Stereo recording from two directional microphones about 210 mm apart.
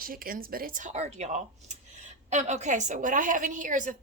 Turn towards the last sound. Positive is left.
turn(degrees=-35)  # may be behind; listen again after turning